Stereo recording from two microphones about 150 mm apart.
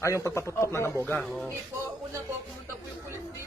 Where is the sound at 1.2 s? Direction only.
Centre (ahead or behind).